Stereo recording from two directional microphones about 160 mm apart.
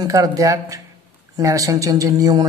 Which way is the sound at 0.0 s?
25° right (ahead or behind).